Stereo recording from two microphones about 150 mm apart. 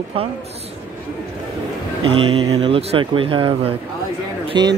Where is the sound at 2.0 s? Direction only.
40° right (ahead or behind).